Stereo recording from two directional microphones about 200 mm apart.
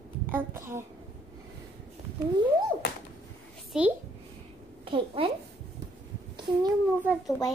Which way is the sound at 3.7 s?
5° right (ahead or behind).